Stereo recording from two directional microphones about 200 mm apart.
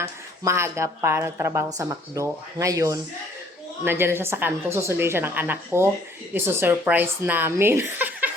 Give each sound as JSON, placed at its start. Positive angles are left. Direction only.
{"t": 0.4, "sound": "a woman's voice", "side_deg": -15}